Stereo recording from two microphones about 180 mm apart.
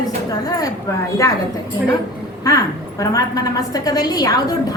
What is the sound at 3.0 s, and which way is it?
A woman's voice, 20° left (ahead or behind).